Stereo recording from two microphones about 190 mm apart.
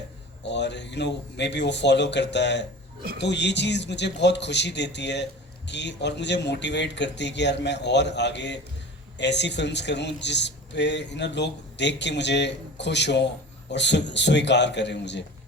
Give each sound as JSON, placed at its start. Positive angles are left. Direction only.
{"t": 0.4, "sound": "speech", "side_deg": 65}